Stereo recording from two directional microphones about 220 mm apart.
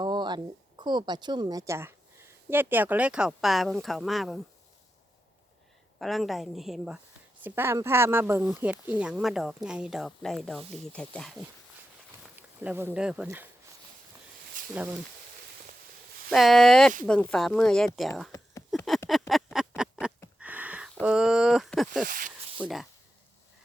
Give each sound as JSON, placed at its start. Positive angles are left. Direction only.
{"t": 0.0, "sound": "a woman's voice", "side_deg": -20}
{"t": 6.0, "sound": "speech", "side_deg": 0}
{"t": 14.6, "sound": "a sound", "side_deg": -35}
{"t": 16.3, "sound": "speech", "side_deg": 0}
{"t": 18.7, "sound": "a sound", "side_deg": 0}
{"t": 22.0, "sound": "speech", "side_deg": -40}
{"t": 22.5, "sound": "speech", "side_deg": -5}